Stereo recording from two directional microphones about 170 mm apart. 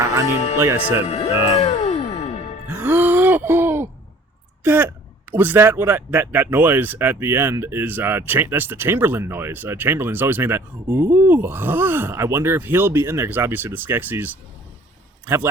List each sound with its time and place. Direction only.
0.6 s speech: 15° right (ahead or behind)
1.0 s music: 40° left (ahead or behind)
2.6 s music: 10° right (ahead or behind)
4.6 s speech: 10° right (ahead or behind)